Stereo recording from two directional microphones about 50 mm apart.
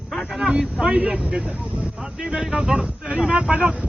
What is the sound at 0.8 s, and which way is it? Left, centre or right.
Speech, centre.